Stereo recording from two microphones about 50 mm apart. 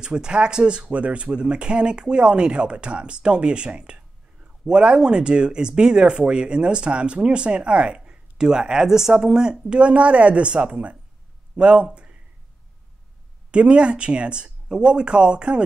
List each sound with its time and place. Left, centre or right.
0.0 s a man's voice: centre
13.5 s speech: right